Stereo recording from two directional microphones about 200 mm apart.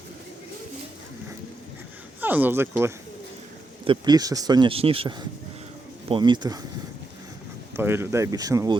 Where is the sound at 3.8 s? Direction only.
25° right (ahead or behind).